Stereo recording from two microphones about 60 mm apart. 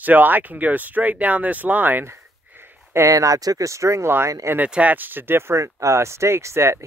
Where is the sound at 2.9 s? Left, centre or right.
Right.